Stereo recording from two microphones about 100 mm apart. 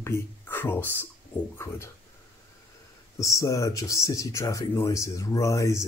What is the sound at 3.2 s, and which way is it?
Speech, 35° left (ahead or behind).